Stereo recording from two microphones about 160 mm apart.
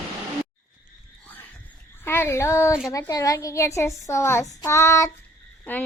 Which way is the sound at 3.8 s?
15° left (ahead or behind).